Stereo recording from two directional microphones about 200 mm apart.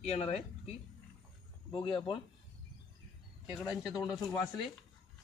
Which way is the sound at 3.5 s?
Centre (ahead or behind).